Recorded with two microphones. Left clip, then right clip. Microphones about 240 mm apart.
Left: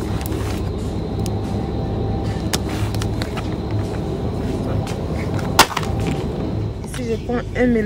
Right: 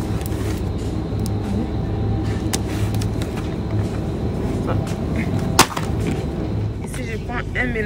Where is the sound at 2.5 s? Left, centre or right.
Centre.